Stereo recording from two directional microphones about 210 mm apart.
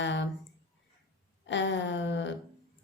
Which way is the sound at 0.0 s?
60° left (ahead or behind).